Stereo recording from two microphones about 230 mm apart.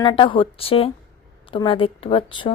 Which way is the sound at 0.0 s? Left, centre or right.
Left.